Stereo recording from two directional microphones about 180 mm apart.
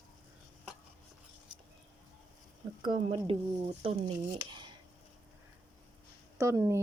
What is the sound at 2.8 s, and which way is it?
Speech, 25° right (ahead or behind).